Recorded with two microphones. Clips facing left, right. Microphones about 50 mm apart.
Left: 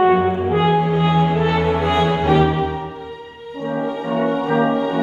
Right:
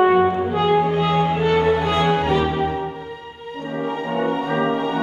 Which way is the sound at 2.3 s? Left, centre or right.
Left.